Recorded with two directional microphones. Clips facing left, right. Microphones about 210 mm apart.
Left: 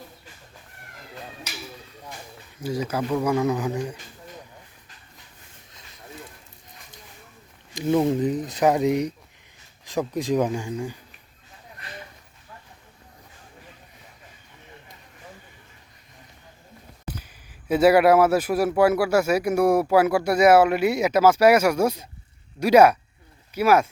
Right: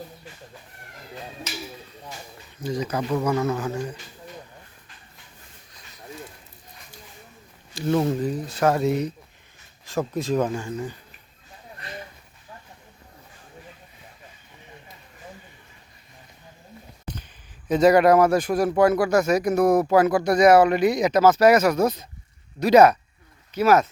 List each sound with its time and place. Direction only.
2.6 s a man's voice: 10° left (ahead or behind)
7.8 s a man's voice: 15° left (ahead or behind)
17.7 s a man's voice: 10° left (ahead or behind)